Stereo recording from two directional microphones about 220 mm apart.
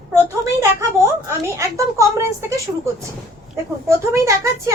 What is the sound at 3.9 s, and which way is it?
Speech, 15° right (ahead or behind).